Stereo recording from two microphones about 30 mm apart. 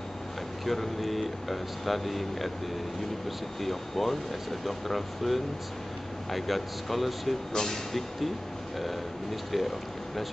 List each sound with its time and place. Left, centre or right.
0.7 s speech: centre
7.5 s speech: centre
8.7 s speech: centre